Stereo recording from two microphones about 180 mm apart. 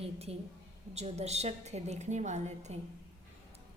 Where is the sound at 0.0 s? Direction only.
35° right (ahead or behind).